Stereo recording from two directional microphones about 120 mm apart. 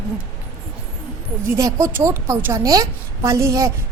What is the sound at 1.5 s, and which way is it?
A woman's voice, 25° right (ahead or behind).